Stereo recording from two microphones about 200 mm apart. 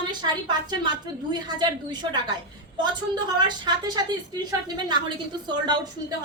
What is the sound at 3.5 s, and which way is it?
A woman's voice, 20° right (ahead or behind).